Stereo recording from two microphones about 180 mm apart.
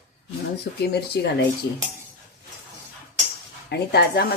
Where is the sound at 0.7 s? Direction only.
65° left (ahead or behind).